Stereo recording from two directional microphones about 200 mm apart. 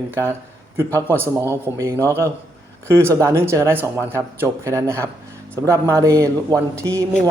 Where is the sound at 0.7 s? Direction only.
10° right (ahead or behind).